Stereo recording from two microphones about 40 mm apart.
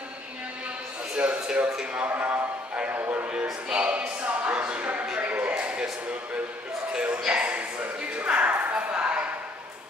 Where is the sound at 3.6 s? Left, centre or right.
Right.